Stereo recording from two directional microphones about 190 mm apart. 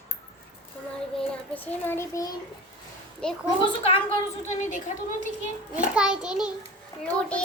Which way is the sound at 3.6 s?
30° left (ahead or behind).